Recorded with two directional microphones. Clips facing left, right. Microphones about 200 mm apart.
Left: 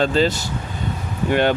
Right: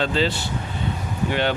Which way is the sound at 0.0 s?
45° left (ahead or behind).